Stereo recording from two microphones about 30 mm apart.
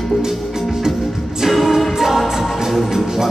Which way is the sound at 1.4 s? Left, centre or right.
Centre.